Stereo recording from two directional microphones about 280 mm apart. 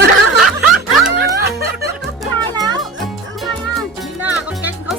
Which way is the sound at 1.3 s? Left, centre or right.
Right.